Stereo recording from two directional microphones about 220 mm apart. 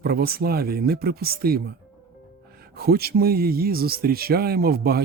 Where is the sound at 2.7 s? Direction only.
45° right (ahead or behind).